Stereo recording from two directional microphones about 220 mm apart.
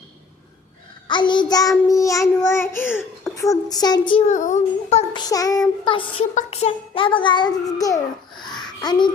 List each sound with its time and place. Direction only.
1.0 s child singing: 20° left (ahead or behind)
4.3 s a sound: 35° left (ahead or behind)
5.2 s child singing: 15° left (ahead or behind)
6.3 s a child's voice: 30° left (ahead or behind)
8.4 s babbling: centre (ahead or behind)
8.6 s babbling: 20° left (ahead or behind)